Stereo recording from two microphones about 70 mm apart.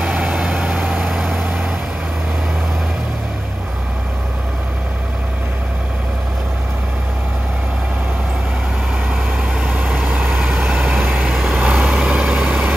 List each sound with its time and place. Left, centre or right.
0.1 s vehicle: centre
1.0 s vehicle: centre
9.1 s vehicle: centre
11.9 s vehicle: centre